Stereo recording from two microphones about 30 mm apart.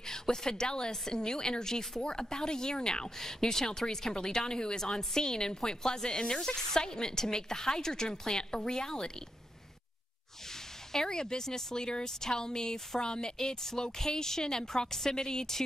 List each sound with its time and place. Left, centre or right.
0.0 s a woman's voice: centre
10.9 s a woman's voice: left